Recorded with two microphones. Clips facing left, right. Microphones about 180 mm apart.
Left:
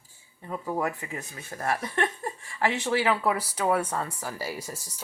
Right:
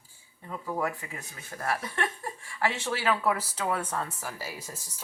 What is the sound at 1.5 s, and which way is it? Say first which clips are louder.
Speech: left 3 dB; 35° left (ahead or behind).